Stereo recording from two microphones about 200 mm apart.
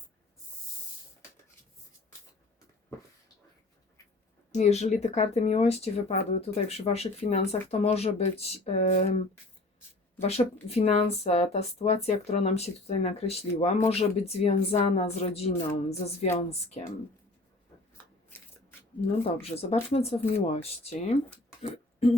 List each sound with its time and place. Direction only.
4.5 s speech: 35° left (ahead or behind)
18.3 s shuffling cards: 10° left (ahead or behind)
19.4 s speech: 30° left (ahead or behind)